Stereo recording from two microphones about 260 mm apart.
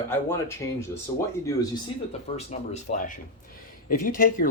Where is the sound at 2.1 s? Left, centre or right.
Left.